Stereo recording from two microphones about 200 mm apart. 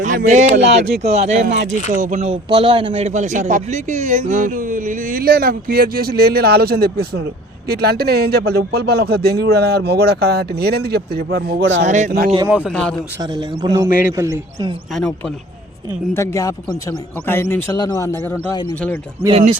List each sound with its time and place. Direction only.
0.0 s speech: 40° right (ahead or behind); by 11.9 s 65° right (ahead or behind)
11.9 s speech: 35° right (ahead or behind)
12.5 s speech: 5° right (ahead or behind)
12.7 s a man's voice: 5° left (ahead or behind)
13.3 s speech: 20° right (ahead or behind)
16.1 s a man's voice: 15° left (ahead or behind)
19.3 s speech: 35° right (ahead or behind)